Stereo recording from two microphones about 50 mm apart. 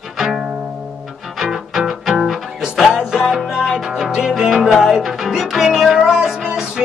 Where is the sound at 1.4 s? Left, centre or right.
Centre.